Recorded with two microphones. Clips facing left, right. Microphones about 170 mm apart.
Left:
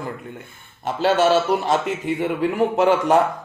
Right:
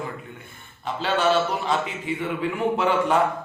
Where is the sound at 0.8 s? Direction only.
45° left (ahead or behind).